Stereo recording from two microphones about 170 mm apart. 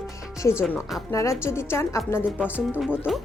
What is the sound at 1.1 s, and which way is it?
A woman's voice, 15° left (ahead or behind).